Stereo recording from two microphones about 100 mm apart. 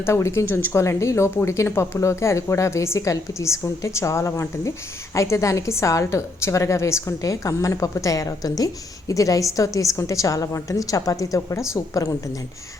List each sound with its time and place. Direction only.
0.0 s a woman's voice: 25° left (ahead or behind)